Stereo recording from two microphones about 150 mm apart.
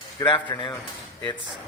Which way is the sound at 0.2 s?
30° left (ahead or behind).